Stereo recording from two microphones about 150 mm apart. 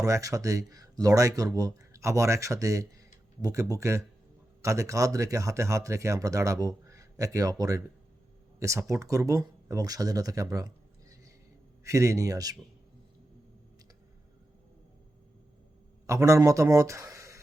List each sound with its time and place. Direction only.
0.0 s speech: 20° right (ahead or behind)
11.8 s speech: 20° right (ahead or behind)
16.0 s a man's voice: 20° right (ahead or behind)